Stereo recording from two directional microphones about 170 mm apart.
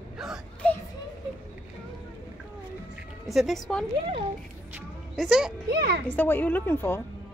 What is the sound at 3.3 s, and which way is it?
Speech, centre (ahead or behind).